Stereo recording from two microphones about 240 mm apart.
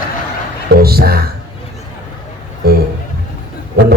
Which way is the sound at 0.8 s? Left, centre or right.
Right.